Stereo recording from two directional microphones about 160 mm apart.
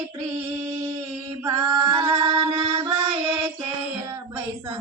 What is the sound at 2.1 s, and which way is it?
Mantra, 30° right (ahead or behind).